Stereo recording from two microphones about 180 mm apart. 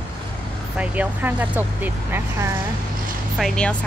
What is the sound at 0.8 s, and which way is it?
Speech, 10° right (ahead or behind).